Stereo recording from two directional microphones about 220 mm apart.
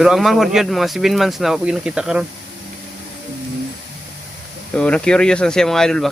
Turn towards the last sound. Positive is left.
turn(degrees=5)  # may be behind; listen again after turning